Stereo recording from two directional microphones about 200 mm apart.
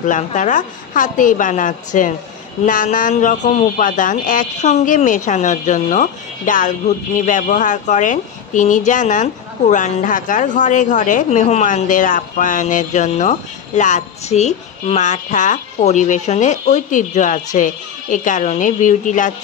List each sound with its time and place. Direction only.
0.0 s a woman's voice: 40° left (ahead or behind)